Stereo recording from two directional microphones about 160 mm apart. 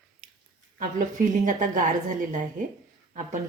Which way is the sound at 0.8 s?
55° right (ahead or behind).